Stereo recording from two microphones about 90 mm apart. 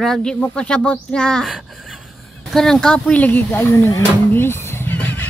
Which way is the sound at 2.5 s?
5° left (ahead or behind).